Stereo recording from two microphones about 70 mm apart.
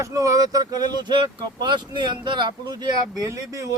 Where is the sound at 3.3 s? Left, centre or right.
Right.